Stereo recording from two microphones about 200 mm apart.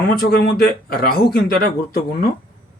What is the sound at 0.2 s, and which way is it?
Speech, 50° left (ahead or behind).